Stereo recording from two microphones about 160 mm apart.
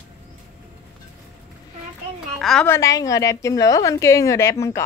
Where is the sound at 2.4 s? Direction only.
5° left (ahead or behind).